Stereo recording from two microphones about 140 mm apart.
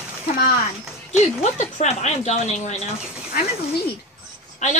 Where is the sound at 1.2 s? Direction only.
50° left (ahead or behind).